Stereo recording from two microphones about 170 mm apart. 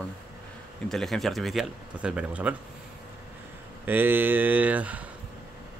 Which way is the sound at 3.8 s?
10° right (ahead or behind).